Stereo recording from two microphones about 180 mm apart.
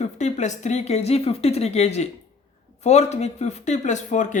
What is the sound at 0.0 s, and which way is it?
Speech, 40° left (ahead or behind).